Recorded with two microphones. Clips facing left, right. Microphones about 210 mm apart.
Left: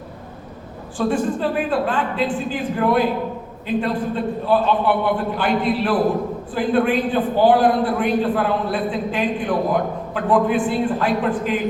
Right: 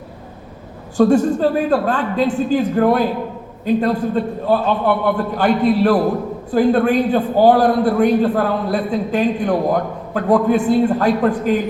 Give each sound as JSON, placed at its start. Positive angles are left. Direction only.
{"t": 0.9, "sound": "a man's voice", "side_deg": -45}